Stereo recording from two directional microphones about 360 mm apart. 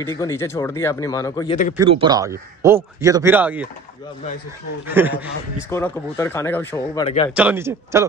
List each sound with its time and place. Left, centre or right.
0.0 s speech: centre
1.8 s speech: centre
4.8 s a man's voice: centre
5.7 s speech: centre